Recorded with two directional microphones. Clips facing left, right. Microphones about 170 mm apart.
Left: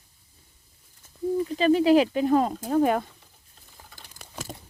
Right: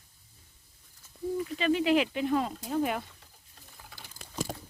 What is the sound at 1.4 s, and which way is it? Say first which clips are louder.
Speech: left 7 dB; 35° left (ahead or behind).